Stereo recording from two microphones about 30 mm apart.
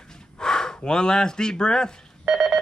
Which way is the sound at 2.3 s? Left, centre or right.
Centre.